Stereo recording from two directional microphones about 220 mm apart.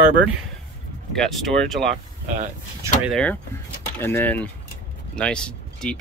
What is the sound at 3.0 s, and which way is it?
Speech, 5° left (ahead or behind).